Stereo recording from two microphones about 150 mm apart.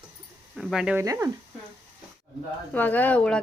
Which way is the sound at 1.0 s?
20° right (ahead or behind).